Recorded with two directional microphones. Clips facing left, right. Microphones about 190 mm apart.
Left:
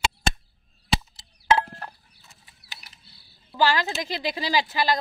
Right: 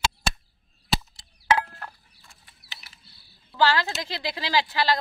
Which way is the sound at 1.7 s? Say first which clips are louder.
Left 2 dB; 25° left (ahead or behind).